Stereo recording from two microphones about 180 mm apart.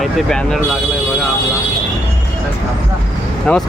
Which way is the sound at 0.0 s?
Centre (ahead or behind).